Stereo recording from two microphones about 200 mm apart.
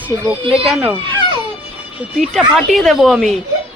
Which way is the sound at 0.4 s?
30° right (ahead or behind).